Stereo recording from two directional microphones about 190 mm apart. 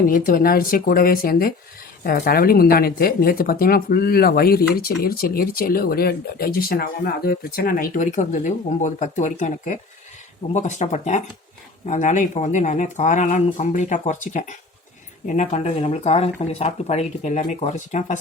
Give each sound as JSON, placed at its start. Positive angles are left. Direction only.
{"t": 0.0, "sound": "speech", "side_deg": 50}